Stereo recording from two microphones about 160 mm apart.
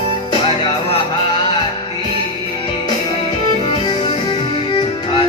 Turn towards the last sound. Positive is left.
turn(degrees=30)  # may be behind; listen again after turning